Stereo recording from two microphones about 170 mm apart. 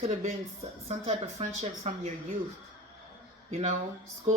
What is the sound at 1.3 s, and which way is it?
Speech, 40° right (ahead or behind).